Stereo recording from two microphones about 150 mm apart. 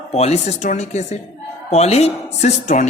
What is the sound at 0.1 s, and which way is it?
Speech, 45° left (ahead or behind).